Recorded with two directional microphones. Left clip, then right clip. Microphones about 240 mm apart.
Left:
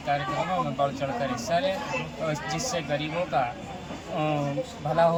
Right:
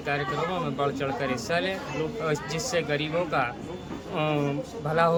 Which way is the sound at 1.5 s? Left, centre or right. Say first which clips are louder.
Left 2 dB; right.